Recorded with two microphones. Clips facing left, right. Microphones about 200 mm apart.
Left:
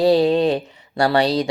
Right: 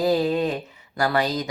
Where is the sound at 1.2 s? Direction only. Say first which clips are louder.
Left 7 dB; 75° left (ahead or behind).